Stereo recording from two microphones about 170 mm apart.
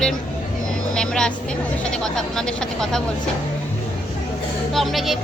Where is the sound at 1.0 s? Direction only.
5° left (ahead or behind).